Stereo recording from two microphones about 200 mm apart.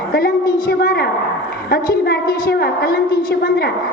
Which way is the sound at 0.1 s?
45° left (ahead or behind).